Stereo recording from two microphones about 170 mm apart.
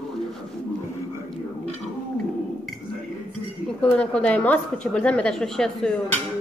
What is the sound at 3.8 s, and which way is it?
A woman's voice, 5° left (ahead or behind).